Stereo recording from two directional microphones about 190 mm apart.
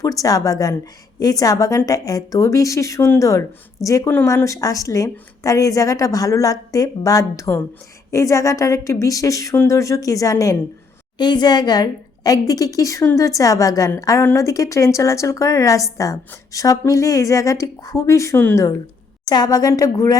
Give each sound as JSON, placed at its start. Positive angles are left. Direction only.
{"t": 0.0, "sound": "a woman's voice", "side_deg": 20}